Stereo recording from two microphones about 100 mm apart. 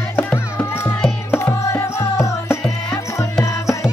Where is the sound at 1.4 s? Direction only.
30° left (ahead or behind).